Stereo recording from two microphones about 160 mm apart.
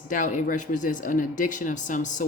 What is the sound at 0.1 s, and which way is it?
Speech, 55° left (ahead or behind).